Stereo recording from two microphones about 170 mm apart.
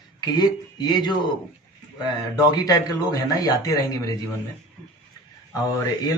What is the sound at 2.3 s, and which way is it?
Speech, 20° left (ahead or behind).